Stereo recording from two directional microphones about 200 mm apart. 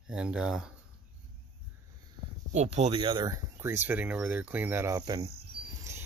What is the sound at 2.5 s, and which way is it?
Speech, 35° right (ahead or behind).